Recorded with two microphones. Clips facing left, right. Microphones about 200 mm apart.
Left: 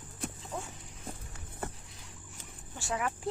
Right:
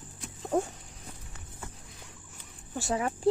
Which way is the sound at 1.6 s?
60° left (ahead or behind).